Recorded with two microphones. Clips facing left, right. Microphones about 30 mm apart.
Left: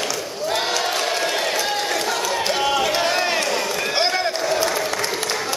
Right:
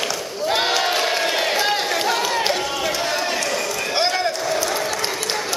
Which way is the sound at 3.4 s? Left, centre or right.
Centre.